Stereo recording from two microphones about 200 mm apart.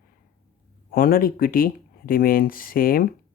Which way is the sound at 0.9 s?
45° left (ahead or behind).